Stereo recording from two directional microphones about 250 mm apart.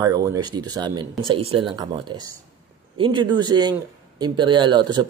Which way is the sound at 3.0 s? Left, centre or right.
Centre.